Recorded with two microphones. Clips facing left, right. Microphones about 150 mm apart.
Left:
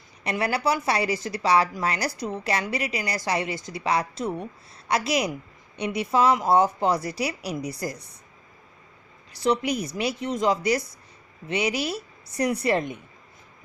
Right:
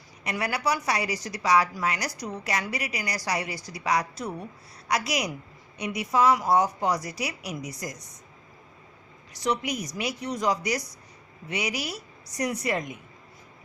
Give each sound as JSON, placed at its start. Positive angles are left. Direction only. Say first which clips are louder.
{"t": 0.3, "sound": "a woman's voice", "louder": "left 3 dB", "side_deg": 30}
{"t": 9.3, "sound": "a woman's voice", "louder": "left 4 dB", "side_deg": 30}